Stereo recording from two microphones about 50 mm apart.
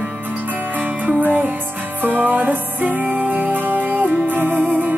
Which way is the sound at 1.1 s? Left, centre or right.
Right.